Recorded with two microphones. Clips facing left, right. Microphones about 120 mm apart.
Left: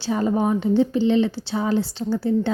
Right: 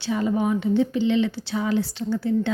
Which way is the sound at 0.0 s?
35° left (ahead or behind).